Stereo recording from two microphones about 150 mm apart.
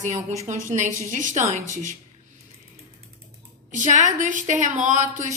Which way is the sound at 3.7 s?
55° right (ahead or behind).